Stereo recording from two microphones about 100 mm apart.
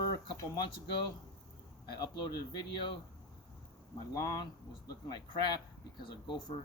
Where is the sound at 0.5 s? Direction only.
50° left (ahead or behind).